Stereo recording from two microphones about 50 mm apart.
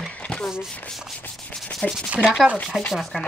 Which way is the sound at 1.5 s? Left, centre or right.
Centre.